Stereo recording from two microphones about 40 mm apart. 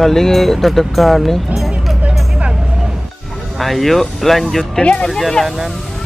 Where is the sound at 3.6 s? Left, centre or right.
Centre.